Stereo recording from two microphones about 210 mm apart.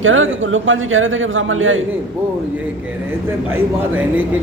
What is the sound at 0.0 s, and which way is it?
A man's voice, 70° right (ahead or behind).